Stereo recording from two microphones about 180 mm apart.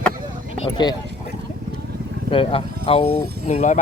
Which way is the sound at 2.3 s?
30° left (ahead or behind).